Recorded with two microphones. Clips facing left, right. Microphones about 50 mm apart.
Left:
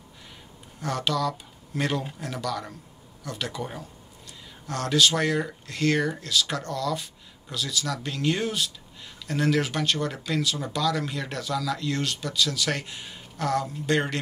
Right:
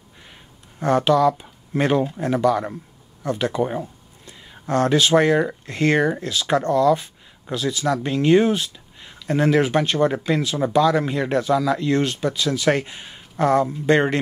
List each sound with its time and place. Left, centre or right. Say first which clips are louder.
0.7 s speech: right 10 dB; right